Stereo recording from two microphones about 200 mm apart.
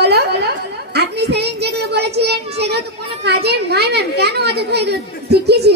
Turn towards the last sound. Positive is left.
turn(degrees=-55)  # may be behind; listen again after turning